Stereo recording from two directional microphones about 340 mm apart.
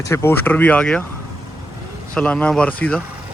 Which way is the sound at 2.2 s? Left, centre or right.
Centre.